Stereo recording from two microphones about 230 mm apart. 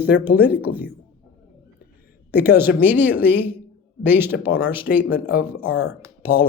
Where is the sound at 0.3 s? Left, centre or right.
Centre.